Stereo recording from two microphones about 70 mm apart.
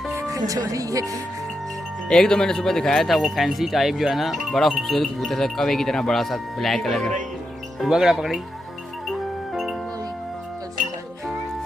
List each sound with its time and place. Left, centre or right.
0.3 s speech: right
2.0 s speech: centre
9.1 s music: centre